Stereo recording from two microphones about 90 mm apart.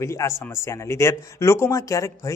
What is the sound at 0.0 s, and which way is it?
Speech, 30° left (ahead or behind).